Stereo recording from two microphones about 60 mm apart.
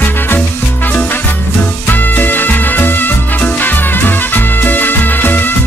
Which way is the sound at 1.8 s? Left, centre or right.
Left.